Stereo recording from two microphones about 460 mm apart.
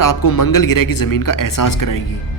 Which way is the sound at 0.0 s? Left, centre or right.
Left.